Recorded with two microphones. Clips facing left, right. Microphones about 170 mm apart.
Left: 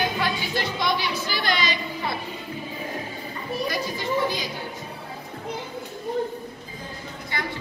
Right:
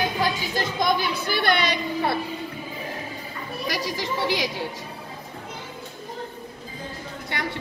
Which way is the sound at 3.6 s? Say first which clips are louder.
Right 3 dB; 90° right.